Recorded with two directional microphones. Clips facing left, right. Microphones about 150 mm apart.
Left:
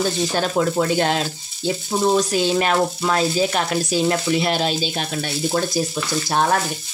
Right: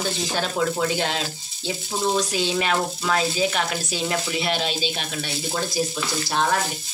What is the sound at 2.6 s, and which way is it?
Speech, 40° left (ahead or behind).